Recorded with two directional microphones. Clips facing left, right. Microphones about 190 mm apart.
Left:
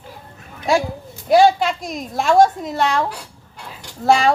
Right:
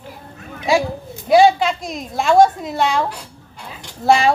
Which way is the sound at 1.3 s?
Centre (ahead or behind).